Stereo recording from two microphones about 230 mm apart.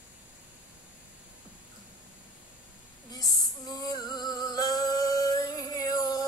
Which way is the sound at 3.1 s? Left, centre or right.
Centre.